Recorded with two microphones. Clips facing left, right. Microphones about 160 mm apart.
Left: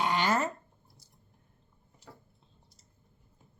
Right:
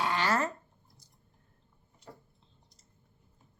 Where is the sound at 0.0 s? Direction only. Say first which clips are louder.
Left 1 dB; 20° left (ahead or behind).